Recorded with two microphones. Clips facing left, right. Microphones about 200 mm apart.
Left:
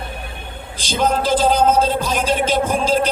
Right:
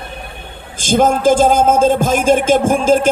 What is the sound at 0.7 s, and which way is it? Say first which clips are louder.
Speech: right 6 dB; 50° right (ahead or behind).